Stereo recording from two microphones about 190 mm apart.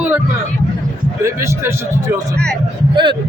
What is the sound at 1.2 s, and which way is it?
Speech, 15° right (ahead or behind).